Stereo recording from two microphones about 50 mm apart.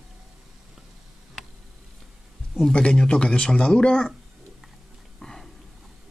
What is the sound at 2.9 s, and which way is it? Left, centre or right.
Speech, centre.